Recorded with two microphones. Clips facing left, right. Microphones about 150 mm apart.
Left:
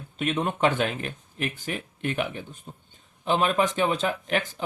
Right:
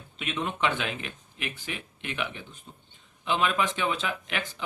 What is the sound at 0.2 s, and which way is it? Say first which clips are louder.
Speech: left 5 dB; 45° left (ahead or behind).